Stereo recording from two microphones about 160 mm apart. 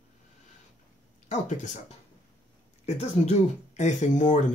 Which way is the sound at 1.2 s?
50° left (ahead or behind).